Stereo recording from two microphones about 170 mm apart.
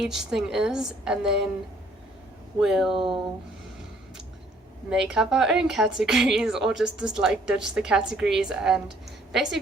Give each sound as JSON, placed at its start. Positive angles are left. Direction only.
{"t": 0.0, "sound": "a woman's voice", "side_deg": -5}
{"t": 2.6, "sound": "a woman's voice", "side_deg": -5}
{"t": 4.9, "sound": "a woman's voice", "side_deg": -5}